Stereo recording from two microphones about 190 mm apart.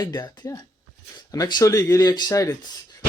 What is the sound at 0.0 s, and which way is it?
Speech, 20° left (ahead or behind).